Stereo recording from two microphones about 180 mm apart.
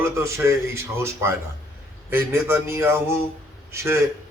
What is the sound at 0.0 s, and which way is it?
Speech, 15° right (ahead or behind).